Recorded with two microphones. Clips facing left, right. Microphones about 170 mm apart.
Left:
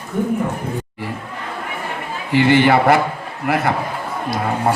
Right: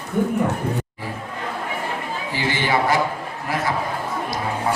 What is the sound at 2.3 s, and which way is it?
A man's voice, 65° left (ahead or behind).